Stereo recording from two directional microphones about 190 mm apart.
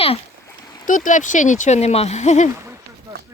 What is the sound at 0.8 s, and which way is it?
Speech, 45° left (ahead or behind).